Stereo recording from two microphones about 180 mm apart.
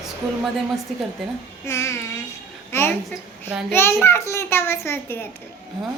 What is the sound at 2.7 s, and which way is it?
Speech, 15° left (ahead or behind).